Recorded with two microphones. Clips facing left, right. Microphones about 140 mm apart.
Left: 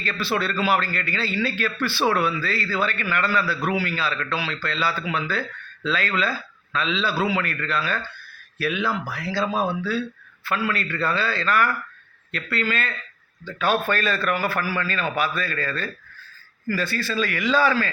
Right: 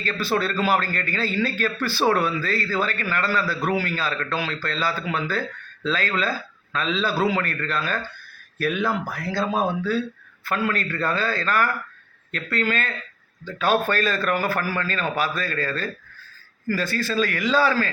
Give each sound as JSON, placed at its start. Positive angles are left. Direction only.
{"t": 0.0, "sound": "a man's voice", "side_deg": -40}